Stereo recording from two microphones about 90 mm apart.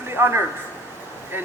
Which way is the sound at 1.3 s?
25° right (ahead or behind).